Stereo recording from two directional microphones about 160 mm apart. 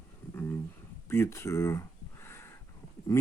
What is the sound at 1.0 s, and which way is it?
Speech, 15° left (ahead or behind).